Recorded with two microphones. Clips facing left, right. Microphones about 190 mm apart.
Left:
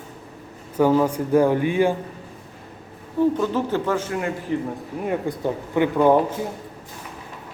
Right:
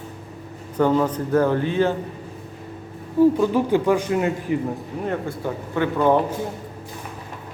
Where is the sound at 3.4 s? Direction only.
15° right (ahead or behind).